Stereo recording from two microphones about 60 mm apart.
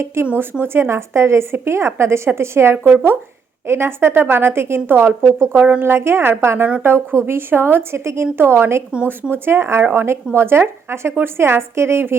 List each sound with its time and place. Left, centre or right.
0.0 s a woman's voice: right
5.5 s speech: right
5.8 s a woman's voice: right